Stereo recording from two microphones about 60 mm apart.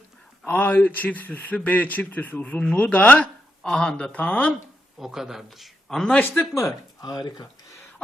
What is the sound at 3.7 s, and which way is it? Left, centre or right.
Speech, centre.